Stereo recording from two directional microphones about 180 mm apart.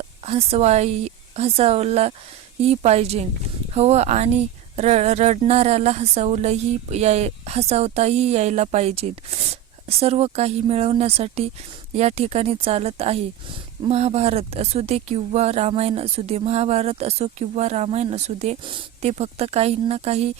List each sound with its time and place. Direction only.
0.3 s speech: 35° right (ahead or behind)